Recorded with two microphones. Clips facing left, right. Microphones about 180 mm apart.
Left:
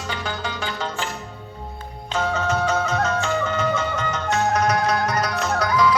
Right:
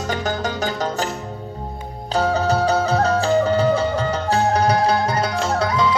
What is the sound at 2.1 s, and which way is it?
Music, 35° right (ahead or behind).